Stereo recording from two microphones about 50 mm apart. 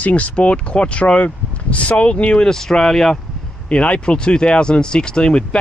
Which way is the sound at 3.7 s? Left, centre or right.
Left.